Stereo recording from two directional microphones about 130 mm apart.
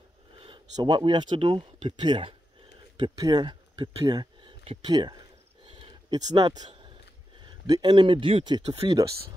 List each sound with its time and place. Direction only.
0.7 s speech: 35° right (ahead or behind)
5.7 s a sound: 40° right (ahead or behind)
7.3 s speech: 30° right (ahead or behind)
8.8 s speech: 30° right (ahead or behind)